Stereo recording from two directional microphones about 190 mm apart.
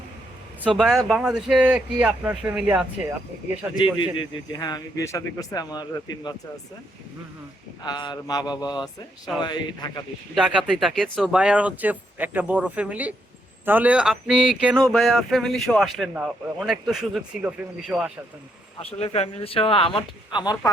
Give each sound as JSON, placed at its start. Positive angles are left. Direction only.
{"t": 0.8, "sound": "speech", "side_deg": 0}
{"t": 4.5, "sound": "speech", "side_deg": 20}
{"t": 7.9, "sound": "speech", "side_deg": 25}
{"t": 10.3, "sound": "speech", "side_deg": -5}
{"t": 18.8, "sound": "speech", "side_deg": 30}